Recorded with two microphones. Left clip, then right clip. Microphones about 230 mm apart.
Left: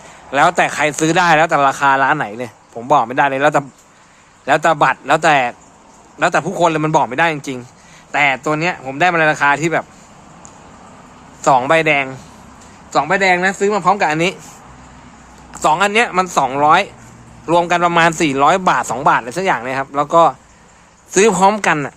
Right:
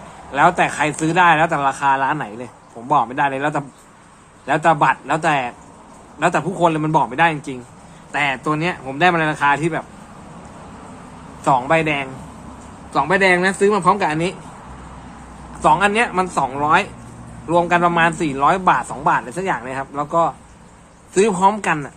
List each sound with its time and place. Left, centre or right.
0.3 s speech: left
11.4 s speech: left
15.6 s speech: left